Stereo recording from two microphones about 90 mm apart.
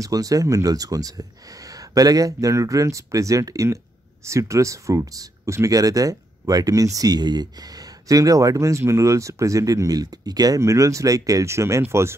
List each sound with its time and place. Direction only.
0.0 s speech: 40° right (ahead or behind)